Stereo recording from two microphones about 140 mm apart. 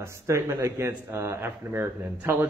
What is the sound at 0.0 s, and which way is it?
A man's voice, 20° right (ahead or behind).